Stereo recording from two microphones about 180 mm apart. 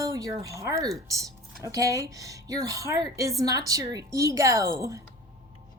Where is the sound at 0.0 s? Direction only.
20° right (ahead or behind).